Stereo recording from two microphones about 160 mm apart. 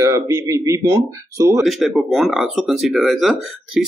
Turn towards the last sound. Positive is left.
turn(degrees=0)  # may be behind; listen again after turning